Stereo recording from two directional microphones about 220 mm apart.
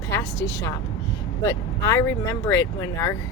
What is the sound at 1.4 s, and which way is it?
Speech, 15° left (ahead or behind).